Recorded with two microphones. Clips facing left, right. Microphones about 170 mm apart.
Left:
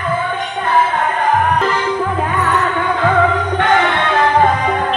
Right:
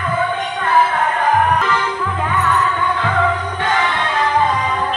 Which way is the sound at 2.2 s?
55° left (ahead or behind).